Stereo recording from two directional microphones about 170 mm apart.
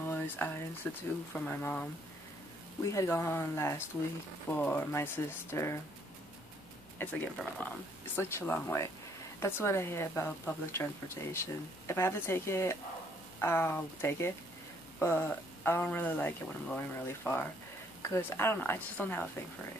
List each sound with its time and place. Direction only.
0.0 s a sound: 10° left (ahead or behind)
0.8 s speech: 10° left (ahead or behind)
2.8 s speech: 20° left (ahead or behind)
7.0 s speech: 10° left (ahead or behind)